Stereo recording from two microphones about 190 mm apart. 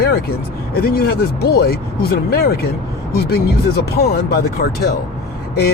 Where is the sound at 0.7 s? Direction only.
55° left (ahead or behind).